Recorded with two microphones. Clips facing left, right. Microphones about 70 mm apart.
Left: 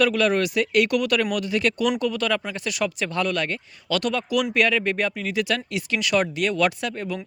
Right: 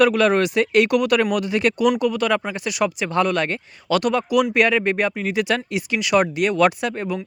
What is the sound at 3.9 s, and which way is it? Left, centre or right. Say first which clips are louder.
Speech: right 5 dB; right.